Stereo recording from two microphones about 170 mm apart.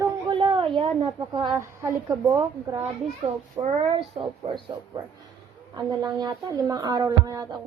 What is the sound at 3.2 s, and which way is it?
A child's voice, 35° right (ahead or behind).